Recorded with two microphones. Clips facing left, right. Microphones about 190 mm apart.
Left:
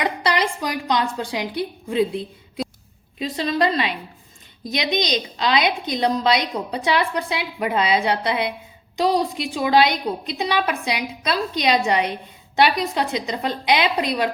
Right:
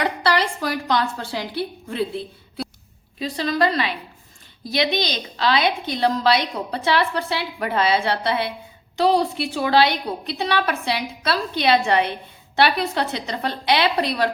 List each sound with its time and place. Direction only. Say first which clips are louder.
0.0 s a woman's voice: right 1 dB; 20° left (ahead or behind)